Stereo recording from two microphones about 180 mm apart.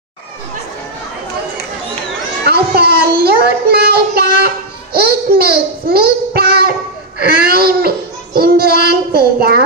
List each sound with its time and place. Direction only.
2.4 s child singing: 65° right (ahead or behind)
7.2 s a sound: 60° right (ahead or behind)
8.4 s child singing: 60° right (ahead or behind)